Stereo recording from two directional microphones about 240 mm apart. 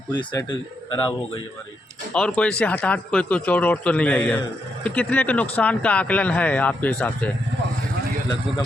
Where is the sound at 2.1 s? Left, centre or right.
Centre.